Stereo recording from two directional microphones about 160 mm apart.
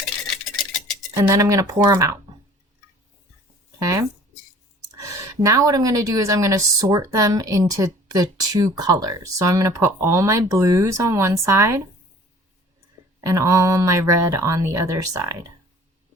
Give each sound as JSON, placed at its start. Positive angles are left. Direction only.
{"t": 1.1, "sound": "speech", "side_deg": -20}
{"t": 3.8, "sound": "speech", "side_deg": -20}
{"t": 13.2, "sound": "speech", "side_deg": -20}